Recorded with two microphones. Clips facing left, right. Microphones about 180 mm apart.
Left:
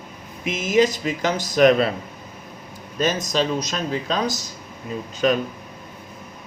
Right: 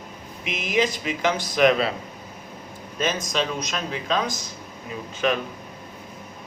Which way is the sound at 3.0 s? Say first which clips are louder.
Left 4 dB; 40° left (ahead or behind).